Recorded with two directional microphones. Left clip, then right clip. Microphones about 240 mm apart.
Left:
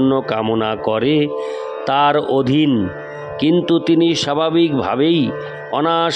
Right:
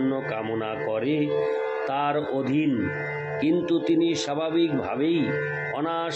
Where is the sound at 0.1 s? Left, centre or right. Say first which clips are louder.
Left 10 dB; left.